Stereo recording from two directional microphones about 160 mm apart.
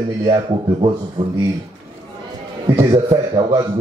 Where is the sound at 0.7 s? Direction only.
35° right (ahead or behind).